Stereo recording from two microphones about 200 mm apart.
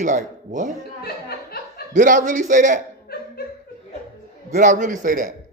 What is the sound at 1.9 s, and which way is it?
Speech, 40° right (ahead or behind).